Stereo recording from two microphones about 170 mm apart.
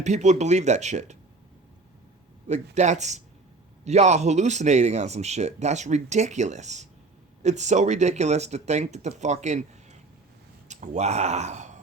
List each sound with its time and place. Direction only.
0.0 s speech: 45° right (ahead or behind)
2.5 s speech: 45° right (ahead or behind)